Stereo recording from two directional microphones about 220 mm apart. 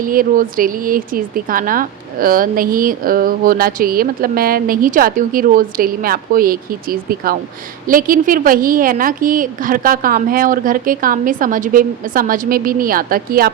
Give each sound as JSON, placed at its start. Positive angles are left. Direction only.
{"t": 0.0, "sound": "speech", "side_deg": -40}